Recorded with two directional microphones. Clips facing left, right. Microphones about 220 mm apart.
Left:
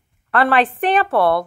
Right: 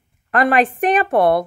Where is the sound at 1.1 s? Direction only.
20° right (ahead or behind).